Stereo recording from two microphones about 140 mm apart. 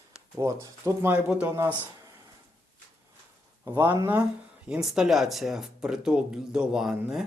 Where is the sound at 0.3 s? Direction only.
25° right (ahead or behind).